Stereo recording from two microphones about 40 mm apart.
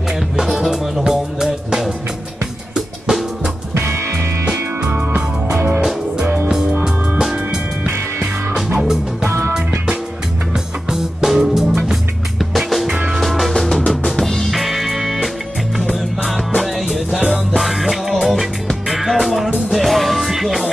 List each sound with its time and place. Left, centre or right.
0.1 s music: centre
3.7 s music: right
4.8 s music: right
10.5 s music: centre
11.2 s music: centre